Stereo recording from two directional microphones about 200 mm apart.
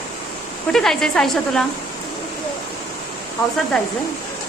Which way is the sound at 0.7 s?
5° left (ahead or behind).